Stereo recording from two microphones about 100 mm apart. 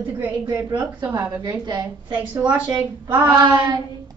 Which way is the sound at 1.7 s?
45° right (ahead or behind).